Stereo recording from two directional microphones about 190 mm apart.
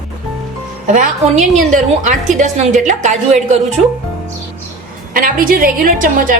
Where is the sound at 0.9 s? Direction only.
40° right (ahead or behind).